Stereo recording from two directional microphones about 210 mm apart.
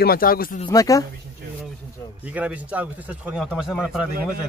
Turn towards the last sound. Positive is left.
turn(degrees=-5)  # may be behind; listen again after turning